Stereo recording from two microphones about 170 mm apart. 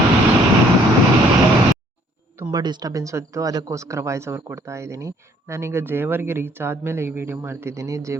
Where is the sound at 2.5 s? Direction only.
25° right (ahead or behind).